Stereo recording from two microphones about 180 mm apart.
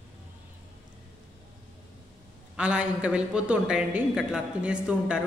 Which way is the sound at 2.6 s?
5° right (ahead or behind).